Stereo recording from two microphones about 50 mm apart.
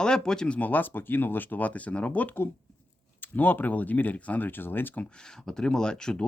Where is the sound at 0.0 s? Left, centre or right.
Centre.